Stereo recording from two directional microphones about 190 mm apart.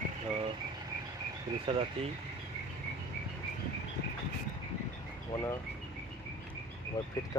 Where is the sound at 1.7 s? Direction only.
25° right (ahead or behind).